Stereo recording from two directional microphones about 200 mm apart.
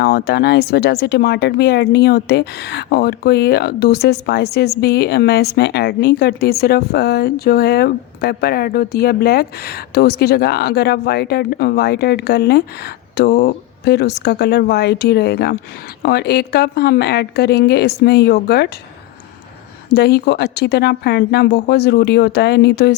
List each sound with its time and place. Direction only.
0.0 s speech: 50° left (ahead or behind)
19.9 s speech: 55° left (ahead or behind)